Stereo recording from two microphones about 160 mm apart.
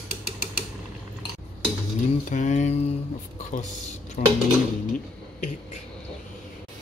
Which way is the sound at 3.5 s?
50° left (ahead or behind).